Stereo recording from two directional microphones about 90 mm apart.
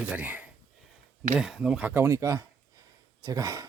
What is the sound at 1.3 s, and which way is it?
Speech, 5° right (ahead or behind).